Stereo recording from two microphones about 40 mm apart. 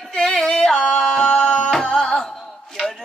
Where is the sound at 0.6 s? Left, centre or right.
Centre.